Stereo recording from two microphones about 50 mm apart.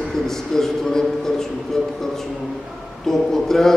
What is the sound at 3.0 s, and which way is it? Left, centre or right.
Speech, centre.